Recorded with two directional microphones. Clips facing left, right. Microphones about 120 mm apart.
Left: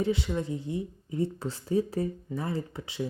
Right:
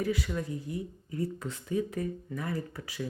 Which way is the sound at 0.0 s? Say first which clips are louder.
Left 3 dB; 25° left (ahead or behind).